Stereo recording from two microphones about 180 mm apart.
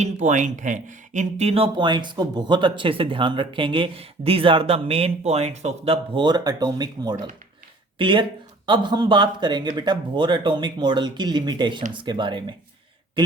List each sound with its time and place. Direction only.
0.0 s speech: 45° right (ahead or behind); by 12.5 s 25° right (ahead or behind)